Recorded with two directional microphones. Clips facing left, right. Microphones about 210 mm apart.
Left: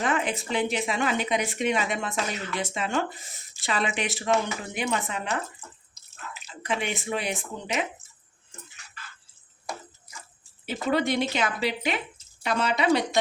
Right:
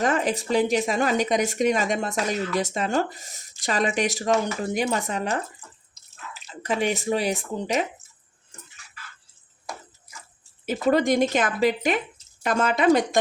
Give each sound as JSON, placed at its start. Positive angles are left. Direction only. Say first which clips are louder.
{"t": 0.0, "sound": "speech", "louder": "right 4 dB", "side_deg": -40}
{"t": 6.6, "sound": "speech", "louder": "right 5 dB", "side_deg": -40}
{"t": 10.7, "sound": "speech", "louder": "right 5 dB", "side_deg": -45}